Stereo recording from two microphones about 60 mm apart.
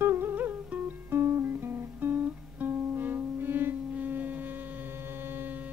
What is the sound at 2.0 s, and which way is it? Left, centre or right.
Music, right.